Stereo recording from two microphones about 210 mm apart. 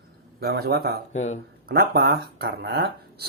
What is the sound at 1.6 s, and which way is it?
Speech, 50° right (ahead or behind).